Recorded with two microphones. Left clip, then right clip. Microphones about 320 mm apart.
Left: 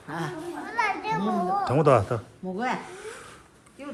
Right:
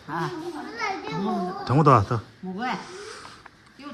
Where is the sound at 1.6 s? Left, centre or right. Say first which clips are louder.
Right 3 dB; centre.